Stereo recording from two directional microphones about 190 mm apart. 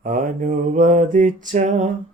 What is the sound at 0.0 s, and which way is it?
Mantra, 45° right (ahead or behind).